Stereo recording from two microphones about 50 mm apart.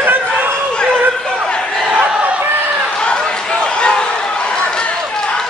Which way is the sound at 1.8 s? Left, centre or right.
Right.